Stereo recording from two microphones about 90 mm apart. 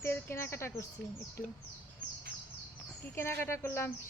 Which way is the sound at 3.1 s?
30° left (ahead or behind).